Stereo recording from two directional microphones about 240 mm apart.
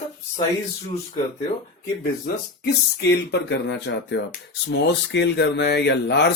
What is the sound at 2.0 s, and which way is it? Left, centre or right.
Speech, left.